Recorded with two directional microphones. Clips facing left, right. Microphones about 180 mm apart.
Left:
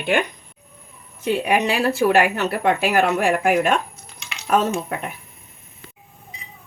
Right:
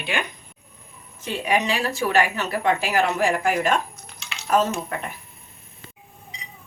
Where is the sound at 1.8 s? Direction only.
60° left (ahead or behind).